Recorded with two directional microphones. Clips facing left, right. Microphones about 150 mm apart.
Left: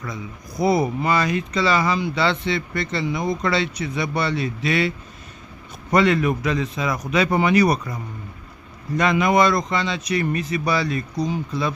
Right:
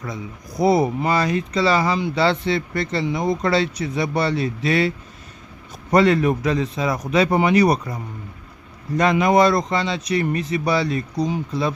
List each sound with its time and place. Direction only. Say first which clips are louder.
0.6 s speech: right 2 dB; 30° right (ahead or behind)